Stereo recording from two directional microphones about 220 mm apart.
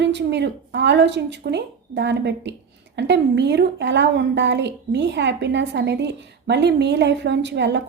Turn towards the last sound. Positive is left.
turn(degrees=-50)  # may be behind; listen again after turning